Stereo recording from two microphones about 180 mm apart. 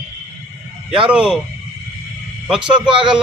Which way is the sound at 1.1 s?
5° right (ahead or behind).